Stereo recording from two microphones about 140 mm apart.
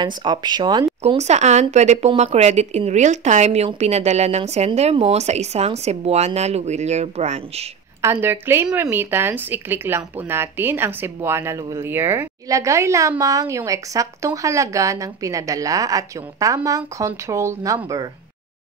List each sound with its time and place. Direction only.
0.0 s speech: 30° right (ahead or behind)
1.0 s speech: 50° right (ahead or behind)
8.0 s speech: 15° right (ahead or behind)